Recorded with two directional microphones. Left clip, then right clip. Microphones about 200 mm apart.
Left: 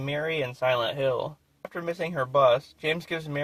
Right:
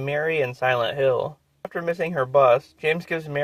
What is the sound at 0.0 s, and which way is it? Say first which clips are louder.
Speech: right 6 dB; 20° right (ahead or behind).